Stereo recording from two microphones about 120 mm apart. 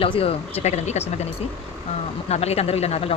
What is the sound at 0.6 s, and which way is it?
Speech, 70° left (ahead or behind).